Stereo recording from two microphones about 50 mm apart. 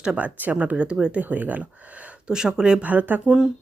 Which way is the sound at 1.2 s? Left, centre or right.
Right.